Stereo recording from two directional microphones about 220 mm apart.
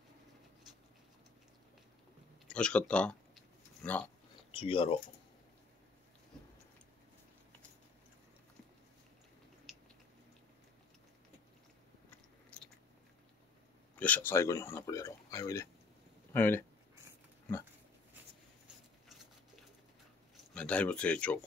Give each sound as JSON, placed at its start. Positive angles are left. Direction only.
{"t": 2.4, "sound": "a sound", "side_deg": 5}
{"t": 4.5, "sound": "speech", "side_deg": 25}
{"t": 9.7, "sound": "biting", "side_deg": 0}
{"t": 12.5, "sound": "biting", "side_deg": 5}
{"t": 13.9, "sound": "speech", "side_deg": 5}
{"t": 20.5, "sound": "speech", "side_deg": 5}